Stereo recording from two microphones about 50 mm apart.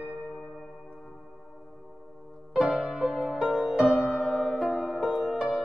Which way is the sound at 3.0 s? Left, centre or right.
Centre.